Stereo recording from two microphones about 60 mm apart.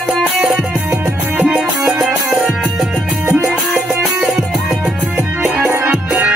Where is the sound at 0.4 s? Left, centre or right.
Centre.